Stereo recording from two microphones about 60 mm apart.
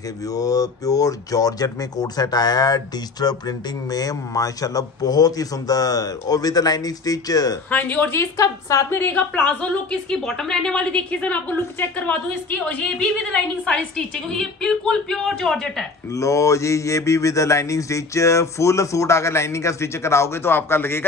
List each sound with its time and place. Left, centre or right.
0.3 s speech: left
7.7 s speech: left
8.4 s a woman's voice: left
9.1 s a woman's voice: left
12.6 s a woman's voice: centre
16.1 s mantra: left